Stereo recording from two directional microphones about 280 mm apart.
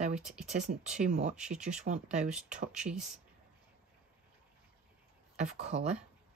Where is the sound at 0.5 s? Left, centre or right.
Right.